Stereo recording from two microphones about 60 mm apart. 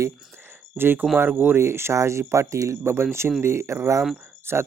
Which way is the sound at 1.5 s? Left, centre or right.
Right.